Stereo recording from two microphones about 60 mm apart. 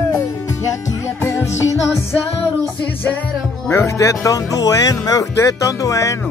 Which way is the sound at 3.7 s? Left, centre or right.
Left.